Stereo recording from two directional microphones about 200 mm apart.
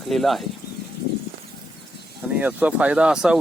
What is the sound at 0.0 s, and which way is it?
Speech, centre (ahead or behind).